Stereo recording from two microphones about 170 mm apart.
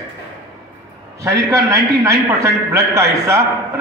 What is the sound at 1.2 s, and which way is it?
A man's voice, 20° right (ahead or behind).